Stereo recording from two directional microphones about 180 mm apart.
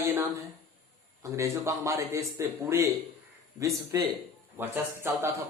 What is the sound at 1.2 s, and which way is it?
Speech, 15° right (ahead or behind).